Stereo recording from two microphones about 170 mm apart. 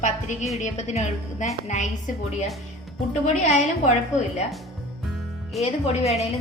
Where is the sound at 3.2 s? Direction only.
40° left (ahead or behind).